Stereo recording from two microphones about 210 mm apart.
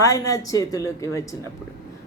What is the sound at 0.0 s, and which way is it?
Speech, 15° left (ahead or behind).